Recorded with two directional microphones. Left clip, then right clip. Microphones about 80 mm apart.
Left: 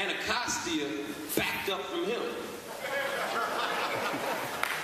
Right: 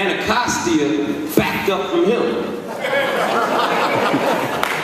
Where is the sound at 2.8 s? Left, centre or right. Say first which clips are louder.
Right 14 dB; centre.